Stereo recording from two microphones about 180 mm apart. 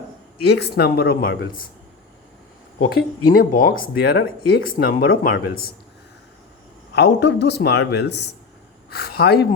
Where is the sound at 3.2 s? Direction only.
50° left (ahead or behind).